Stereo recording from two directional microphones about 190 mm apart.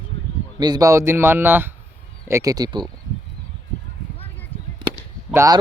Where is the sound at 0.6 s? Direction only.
20° right (ahead or behind).